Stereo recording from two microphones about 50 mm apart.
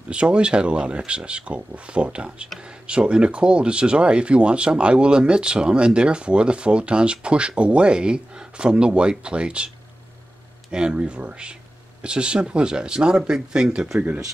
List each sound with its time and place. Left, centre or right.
0.1 s speech: right
10.7 s speech: centre